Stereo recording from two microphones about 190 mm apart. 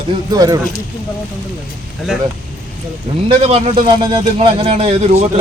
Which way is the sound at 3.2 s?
30° right (ahead or behind).